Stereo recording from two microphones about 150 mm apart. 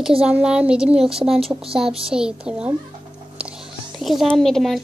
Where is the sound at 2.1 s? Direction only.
5° right (ahead or behind).